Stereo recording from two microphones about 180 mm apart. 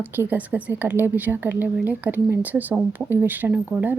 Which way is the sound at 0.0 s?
10° right (ahead or behind).